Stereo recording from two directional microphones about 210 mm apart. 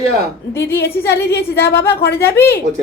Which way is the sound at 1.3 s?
50° left (ahead or behind).